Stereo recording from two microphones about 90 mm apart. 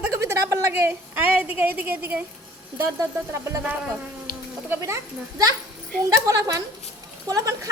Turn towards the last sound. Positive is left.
turn(degrees=-40)  # may be behind; listen again after turning